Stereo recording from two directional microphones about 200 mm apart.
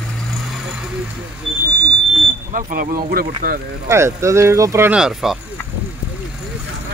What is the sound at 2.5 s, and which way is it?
Speech, 40° right (ahead or behind).